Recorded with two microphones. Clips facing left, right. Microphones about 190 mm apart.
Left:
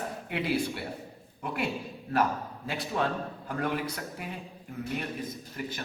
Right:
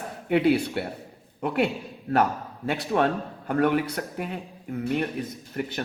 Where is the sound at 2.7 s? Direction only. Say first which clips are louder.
Right 7 dB; 65° right (ahead or behind).